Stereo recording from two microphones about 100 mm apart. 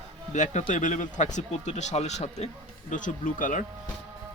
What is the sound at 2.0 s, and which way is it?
Speech, 90° left.